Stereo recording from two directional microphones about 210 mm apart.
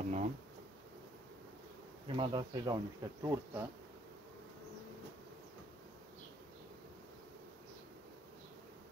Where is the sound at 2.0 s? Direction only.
25° right (ahead or behind).